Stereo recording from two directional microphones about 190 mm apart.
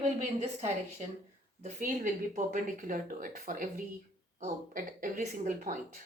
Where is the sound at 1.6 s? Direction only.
40° right (ahead or behind).